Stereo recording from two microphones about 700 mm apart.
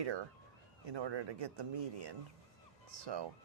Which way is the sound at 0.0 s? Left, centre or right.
Right.